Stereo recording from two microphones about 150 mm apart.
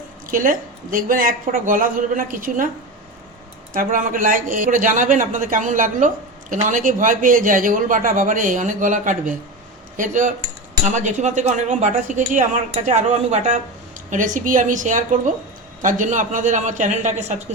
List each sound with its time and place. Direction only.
0.3 s speech: 65° right (ahead or behind)
3.7 s speech: 70° right (ahead or behind); by 17.3 s 50° right (ahead or behind)